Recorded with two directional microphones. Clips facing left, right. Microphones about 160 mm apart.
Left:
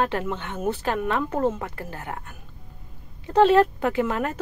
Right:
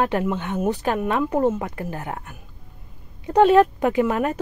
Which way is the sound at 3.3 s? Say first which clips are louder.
Right 2 dB; 15° right (ahead or behind).